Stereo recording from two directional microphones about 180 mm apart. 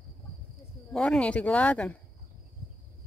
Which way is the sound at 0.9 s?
5° left (ahead or behind).